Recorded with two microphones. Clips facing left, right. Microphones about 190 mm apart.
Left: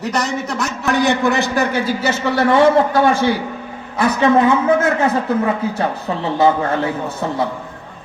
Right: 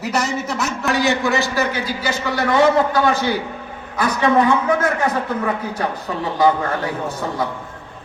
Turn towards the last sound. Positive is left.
turn(degrees=25)  # may be behind; listen again after turning